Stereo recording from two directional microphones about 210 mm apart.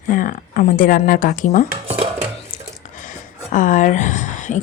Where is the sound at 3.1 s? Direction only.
40° left (ahead or behind).